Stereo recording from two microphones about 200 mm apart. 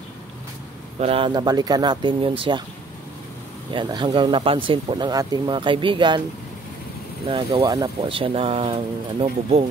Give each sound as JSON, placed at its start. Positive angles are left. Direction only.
{"t": 0.9, "sound": "speech", "side_deg": -30}
{"t": 3.7, "sound": "speech", "side_deg": -25}
{"t": 7.2, "sound": "speech", "side_deg": -25}